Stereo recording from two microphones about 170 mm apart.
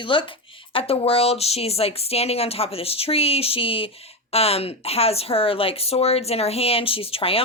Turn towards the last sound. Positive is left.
turn(degrees=35)  # may be behind; listen again after turning